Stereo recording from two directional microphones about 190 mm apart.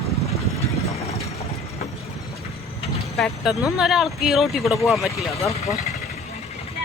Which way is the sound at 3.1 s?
Centre (ahead or behind).